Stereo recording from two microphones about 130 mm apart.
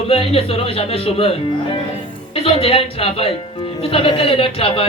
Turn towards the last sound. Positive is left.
turn(degrees=45)  # may be behind; listen again after turning